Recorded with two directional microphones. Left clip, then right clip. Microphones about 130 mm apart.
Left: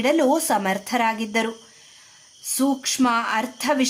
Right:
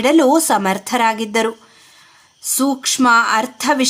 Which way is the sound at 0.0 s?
35° right (ahead or behind).